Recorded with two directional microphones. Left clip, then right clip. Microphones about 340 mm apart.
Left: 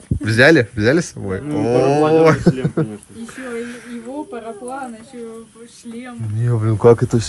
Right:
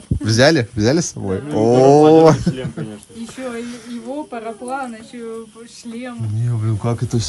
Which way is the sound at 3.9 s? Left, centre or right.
Centre.